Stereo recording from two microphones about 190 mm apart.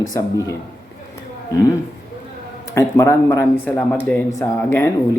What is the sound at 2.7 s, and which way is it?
Speech, 15° left (ahead or behind).